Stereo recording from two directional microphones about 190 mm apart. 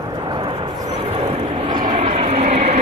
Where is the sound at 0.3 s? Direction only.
25° right (ahead or behind).